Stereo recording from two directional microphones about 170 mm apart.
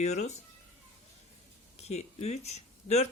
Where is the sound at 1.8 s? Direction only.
40° left (ahead or behind).